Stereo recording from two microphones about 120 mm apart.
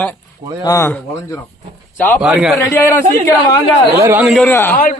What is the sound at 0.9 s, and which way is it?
Speech, 15° left (ahead or behind).